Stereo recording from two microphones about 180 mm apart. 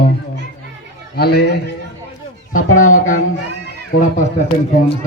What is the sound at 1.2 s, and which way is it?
Speech, 60° left (ahead or behind).